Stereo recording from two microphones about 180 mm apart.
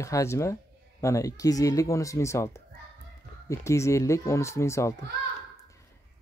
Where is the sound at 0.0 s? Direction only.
15° left (ahead or behind).